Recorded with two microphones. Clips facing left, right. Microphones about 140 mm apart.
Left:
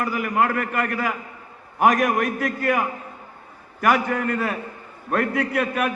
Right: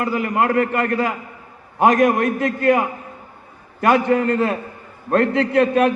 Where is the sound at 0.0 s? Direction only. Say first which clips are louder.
Right 3 dB; 25° right (ahead or behind).